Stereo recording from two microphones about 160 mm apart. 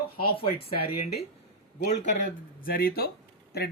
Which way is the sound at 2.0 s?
55° left (ahead or behind).